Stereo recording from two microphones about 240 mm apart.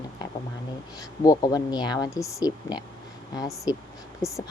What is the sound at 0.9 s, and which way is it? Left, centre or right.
Speech, centre.